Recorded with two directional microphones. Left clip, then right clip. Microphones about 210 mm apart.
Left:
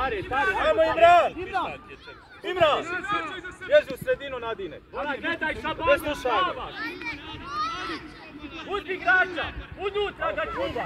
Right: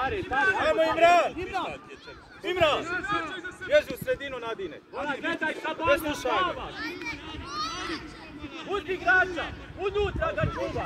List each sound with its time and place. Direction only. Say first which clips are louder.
0.0 s a man's voice: even; 30° right (ahead or behind)
0.7 s speech: left 5 dB; 45° left (ahead or behind)
2.8 s a man's voice: left 1 dB; 40° right (ahead or behind)
3.6 s speech: left 3 dB; 45° left (ahead or behind)
5.0 s a man's voice: left 1 dB; 25° right (ahead or behind)
5.9 s speech: left 2 dB; 45° left (ahead or behind)
6.8 s speech: left 2 dB; 5° right (ahead or behind)
7.4 s a sound: left 4 dB; 40° left (ahead or behind)
8.6 s a man's voice: left 1 dB; 30° right (ahead or behind)